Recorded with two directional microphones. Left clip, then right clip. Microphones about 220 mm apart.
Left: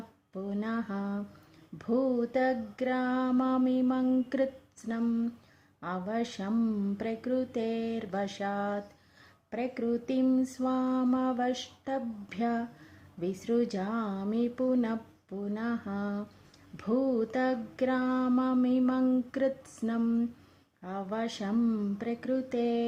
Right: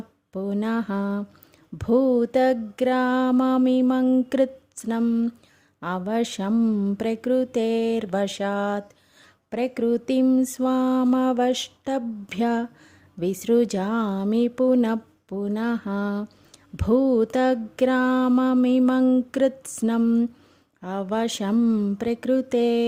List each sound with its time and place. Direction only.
0.3 s mantra: 45° right (ahead or behind)